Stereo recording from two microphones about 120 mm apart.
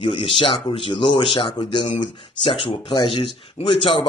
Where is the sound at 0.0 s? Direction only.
50° left (ahead or behind).